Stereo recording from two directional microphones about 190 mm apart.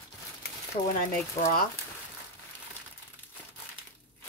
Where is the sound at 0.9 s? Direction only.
45° left (ahead or behind).